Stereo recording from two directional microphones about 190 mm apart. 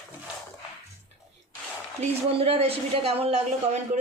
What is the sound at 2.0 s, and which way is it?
A woman's voice, 30° right (ahead or behind).